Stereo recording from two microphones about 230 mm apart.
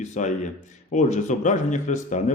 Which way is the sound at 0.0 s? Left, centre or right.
Left.